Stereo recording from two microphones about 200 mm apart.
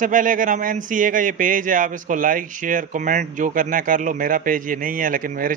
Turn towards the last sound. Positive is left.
turn(degrees=-40)  # may be behind; listen again after turning